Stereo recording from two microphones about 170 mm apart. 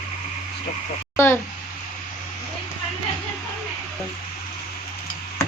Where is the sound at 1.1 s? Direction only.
15° left (ahead or behind).